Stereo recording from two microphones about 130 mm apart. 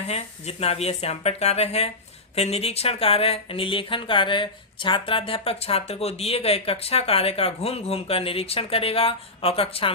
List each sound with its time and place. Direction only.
0.1 s speech: 55° left (ahead or behind)